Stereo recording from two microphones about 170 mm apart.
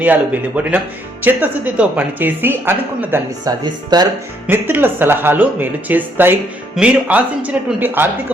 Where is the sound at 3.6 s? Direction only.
25° right (ahead or behind).